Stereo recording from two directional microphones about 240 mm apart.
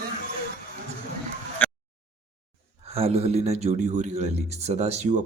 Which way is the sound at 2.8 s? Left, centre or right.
Right.